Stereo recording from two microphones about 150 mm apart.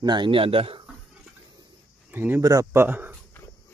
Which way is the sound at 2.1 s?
15° right (ahead or behind).